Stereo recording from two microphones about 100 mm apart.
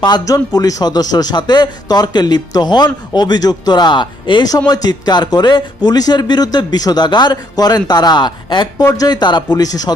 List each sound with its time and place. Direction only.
0.0 s a man's voice: 45° left (ahead or behind)